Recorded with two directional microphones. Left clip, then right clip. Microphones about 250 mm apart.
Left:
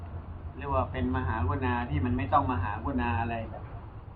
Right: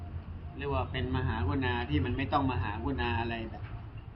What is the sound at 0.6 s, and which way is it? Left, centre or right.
A man's voice, right.